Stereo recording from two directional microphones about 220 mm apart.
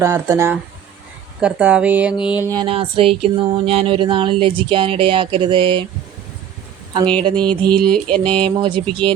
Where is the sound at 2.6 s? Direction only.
25° right (ahead or behind).